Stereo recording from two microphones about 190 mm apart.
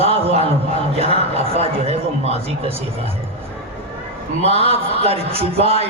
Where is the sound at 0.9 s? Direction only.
30° right (ahead or behind).